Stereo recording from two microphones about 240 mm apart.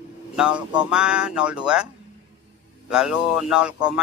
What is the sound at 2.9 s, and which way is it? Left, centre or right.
Speech, centre.